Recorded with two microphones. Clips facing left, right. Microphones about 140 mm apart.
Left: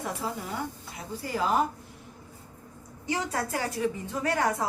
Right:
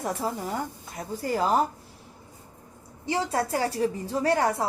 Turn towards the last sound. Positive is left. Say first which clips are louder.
# right 3 dB
turn(degrees=-30)  # may be behind; listen again after turning